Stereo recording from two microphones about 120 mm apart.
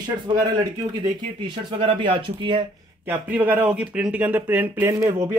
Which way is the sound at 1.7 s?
45° right (ahead or behind).